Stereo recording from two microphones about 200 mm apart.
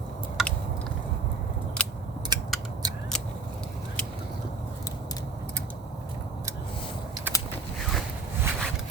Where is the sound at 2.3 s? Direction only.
20° right (ahead or behind).